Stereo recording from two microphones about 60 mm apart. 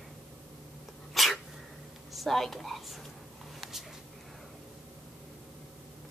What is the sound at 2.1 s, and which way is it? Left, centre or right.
Speech, centre.